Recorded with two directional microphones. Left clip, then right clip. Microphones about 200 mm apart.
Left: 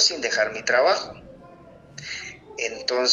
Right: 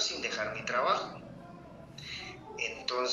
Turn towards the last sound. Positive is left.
turn(degrees=30)  # may be behind; listen again after turning